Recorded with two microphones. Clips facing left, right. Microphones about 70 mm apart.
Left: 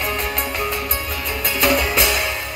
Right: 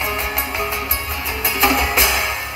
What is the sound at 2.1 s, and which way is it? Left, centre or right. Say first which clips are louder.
Music: right 1 dB; centre.